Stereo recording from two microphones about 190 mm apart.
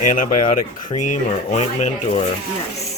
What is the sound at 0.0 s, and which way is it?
Speech, 45° left (ahead or behind).